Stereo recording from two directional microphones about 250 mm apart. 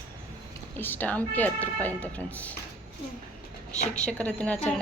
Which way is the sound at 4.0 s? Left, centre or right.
Centre.